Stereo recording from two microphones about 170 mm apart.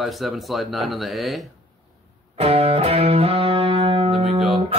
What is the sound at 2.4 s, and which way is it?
Music, 35° right (ahead or behind).